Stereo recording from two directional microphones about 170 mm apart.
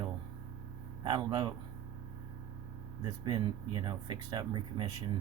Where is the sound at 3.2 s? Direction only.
25° right (ahead or behind).